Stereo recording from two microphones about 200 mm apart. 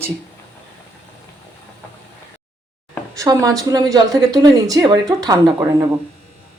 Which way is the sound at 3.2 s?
15° right (ahead or behind).